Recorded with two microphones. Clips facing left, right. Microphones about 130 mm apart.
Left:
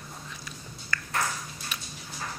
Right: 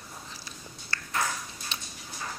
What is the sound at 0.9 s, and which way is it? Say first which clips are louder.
Ping: left 4 dB; 30° right (ahead or behind).